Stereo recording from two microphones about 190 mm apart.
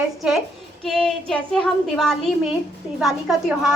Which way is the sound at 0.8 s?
Centre (ahead or behind).